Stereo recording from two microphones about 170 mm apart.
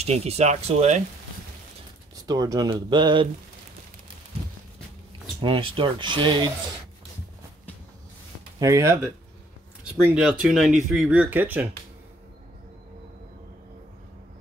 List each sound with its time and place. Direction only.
0.0 s speech: 40° right (ahead or behind)
2.2 s speech: 20° right (ahead or behind)
5.4 s speech: 30° right (ahead or behind)
8.5 s speech: 20° right (ahead or behind)
10.0 s speech: 5° right (ahead or behind)